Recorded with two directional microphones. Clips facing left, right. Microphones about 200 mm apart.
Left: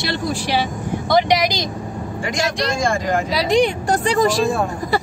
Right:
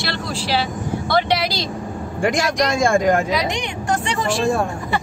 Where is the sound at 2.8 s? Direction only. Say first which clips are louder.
Right 7 dB; 50° right (ahead or behind).